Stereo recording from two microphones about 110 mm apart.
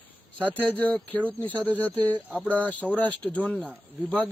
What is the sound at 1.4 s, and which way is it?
Speech, 15° left (ahead or behind).